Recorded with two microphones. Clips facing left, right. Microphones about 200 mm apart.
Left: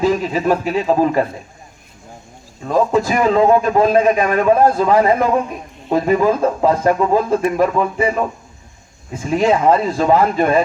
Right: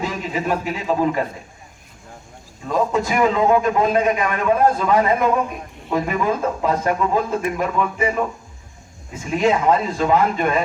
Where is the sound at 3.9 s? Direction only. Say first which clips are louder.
Left 5 dB; 35° left (ahead or behind).